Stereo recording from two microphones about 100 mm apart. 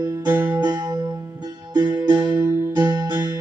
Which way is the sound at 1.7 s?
35° right (ahead or behind).